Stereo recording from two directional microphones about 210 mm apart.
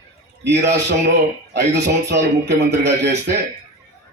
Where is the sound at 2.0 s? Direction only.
55° right (ahead or behind).